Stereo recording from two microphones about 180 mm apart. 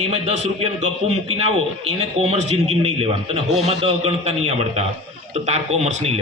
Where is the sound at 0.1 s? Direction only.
35° right (ahead or behind).